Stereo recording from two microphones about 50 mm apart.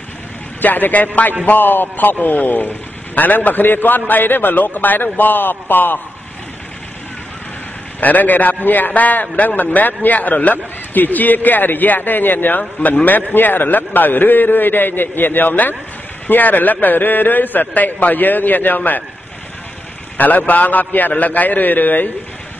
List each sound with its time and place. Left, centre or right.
0.6 s a man's voice: left
8.0 s a man's voice: left
20.2 s a man's voice: left